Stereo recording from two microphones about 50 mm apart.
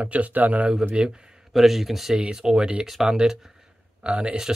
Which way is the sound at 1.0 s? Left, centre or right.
Centre.